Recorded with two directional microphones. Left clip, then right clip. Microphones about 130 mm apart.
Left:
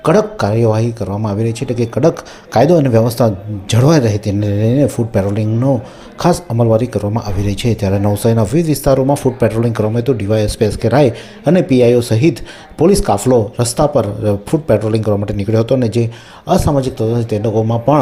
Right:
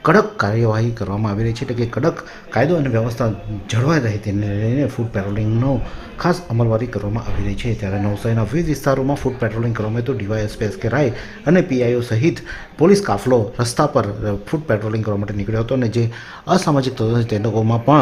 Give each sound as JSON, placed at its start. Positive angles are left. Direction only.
{"t": 0.0, "sound": "speech", "side_deg": 20}
{"t": 16.5, "sound": "a man's voice", "side_deg": 10}